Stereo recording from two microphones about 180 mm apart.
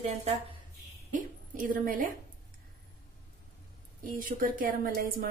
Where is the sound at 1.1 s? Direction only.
45° right (ahead or behind).